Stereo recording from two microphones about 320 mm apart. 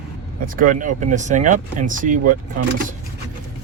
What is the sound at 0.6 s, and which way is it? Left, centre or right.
Speech, right.